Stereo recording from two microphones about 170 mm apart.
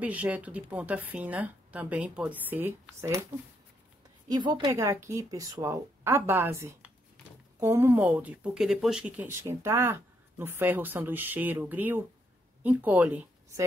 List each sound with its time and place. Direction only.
0.0 s speech: 10° right (ahead or behind)
4.3 s speech: 25° right (ahead or behind)